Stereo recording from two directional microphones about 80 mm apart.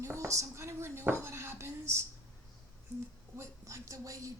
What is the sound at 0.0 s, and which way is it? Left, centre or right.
Speech, right.